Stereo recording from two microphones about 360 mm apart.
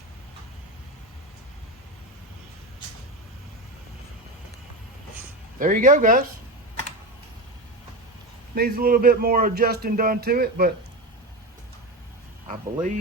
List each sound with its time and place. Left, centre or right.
5.5 s speech: right
8.5 s speech: right
12.5 s speech: centre